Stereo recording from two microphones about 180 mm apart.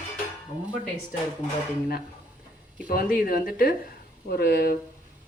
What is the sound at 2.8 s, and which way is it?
Speech, 50° left (ahead or behind).